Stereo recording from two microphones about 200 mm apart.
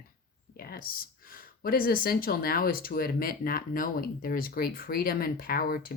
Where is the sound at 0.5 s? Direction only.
50° left (ahead or behind).